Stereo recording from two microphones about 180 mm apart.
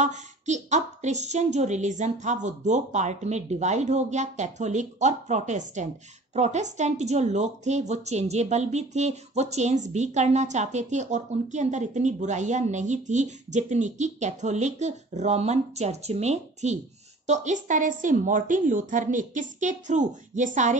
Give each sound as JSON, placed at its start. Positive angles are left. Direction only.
{"t": 0.0, "sound": "a woman's voice", "side_deg": -40}